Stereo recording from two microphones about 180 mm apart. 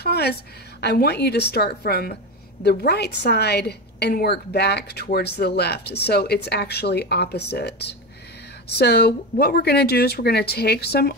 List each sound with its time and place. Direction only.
0.0 s a woman's voice: 65° left (ahead or behind)